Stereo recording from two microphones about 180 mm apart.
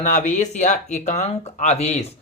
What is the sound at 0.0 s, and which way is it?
Speech, 45° left (ahead or behind).